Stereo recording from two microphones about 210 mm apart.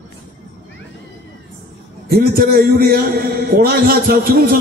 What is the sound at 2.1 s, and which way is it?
A man's voice, 45° right (ahead or behind).